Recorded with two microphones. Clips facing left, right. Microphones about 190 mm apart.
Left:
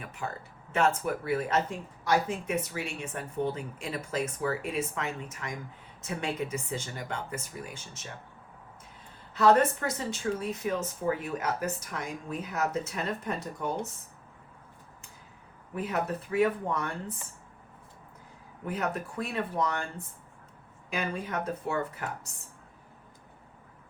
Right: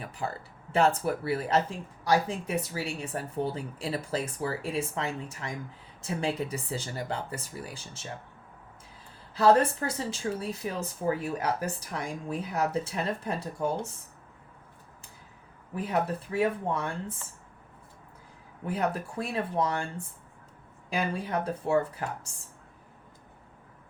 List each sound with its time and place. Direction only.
0.0 s speech: 35° right (ahead or behind)
9.3 s speech: 30° right (ahead or behind)
15.7 s speech: 30° right (ahead or behind)
18.6 s speech: 30° right (ahead or behind)